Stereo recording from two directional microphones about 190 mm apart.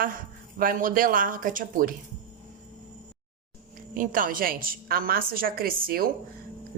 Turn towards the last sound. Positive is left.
turn(degrees=-50)  # may be behind; listen again after turning